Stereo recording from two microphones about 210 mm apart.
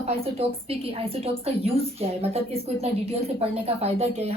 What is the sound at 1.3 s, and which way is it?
A woman's voice, 30° right (ahead or behind).